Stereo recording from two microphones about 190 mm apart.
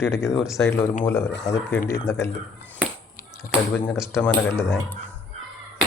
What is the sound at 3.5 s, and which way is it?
Speech, 5° left (ahead or behind).